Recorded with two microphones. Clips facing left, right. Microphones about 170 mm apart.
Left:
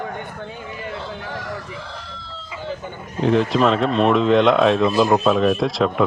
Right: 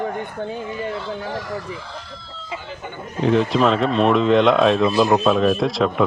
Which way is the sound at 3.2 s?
Centre (ahead or behind).